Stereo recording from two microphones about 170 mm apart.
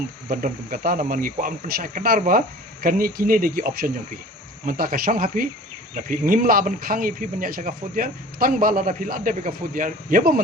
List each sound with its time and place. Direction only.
0.3 s speech: 55° right (ahead or behind)